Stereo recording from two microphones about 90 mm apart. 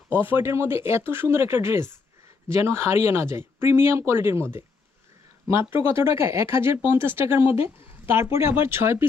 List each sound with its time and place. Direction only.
0.1 s speech: 25° right (ahead or behind)